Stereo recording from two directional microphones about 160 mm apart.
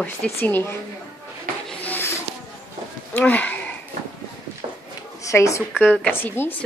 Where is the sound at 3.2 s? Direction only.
10° left (ahead or behind).